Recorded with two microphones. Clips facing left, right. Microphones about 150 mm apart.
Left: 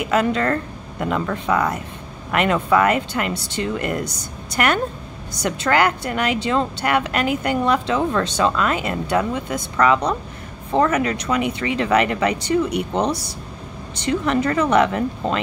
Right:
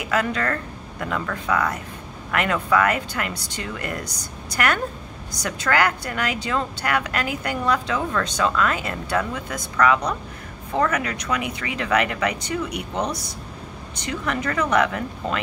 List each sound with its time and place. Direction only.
0.1 s speech: 25° left (ahead or behind)